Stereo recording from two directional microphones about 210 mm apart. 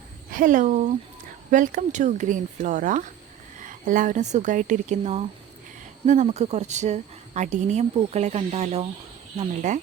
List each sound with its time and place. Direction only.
0.3 s a woman's voice: 40° right (ahead or behind)